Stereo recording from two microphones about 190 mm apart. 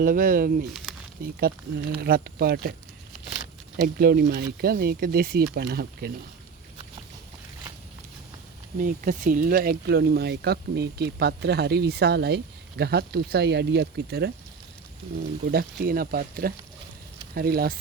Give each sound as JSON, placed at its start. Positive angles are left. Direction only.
{"t": 0.0, "sound": "speech", "side_deg": -45}
{"t": 3.9, "sound": "speech", "side_deg": -55}
{"t": 8.8, "sound": "speech", "side_deg": -45}
{"t": 15.5, "sound": "speech", "side_deg": -50}